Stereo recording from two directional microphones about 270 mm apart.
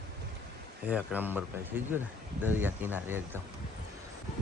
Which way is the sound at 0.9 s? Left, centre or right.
Centre.